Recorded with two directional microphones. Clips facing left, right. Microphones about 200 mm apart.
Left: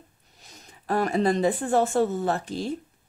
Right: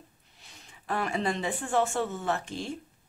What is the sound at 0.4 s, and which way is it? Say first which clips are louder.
Speech: left 4 dB; 40° left (ahead or behind).